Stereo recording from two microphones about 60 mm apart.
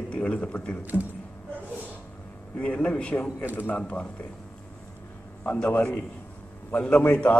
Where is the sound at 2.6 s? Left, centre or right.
Centre.